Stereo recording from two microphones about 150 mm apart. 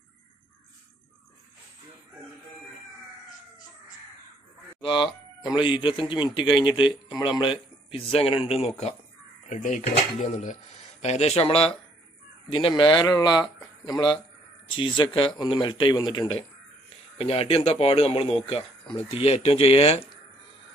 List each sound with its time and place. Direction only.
4.8 s speech: 35° left (ahead or behind)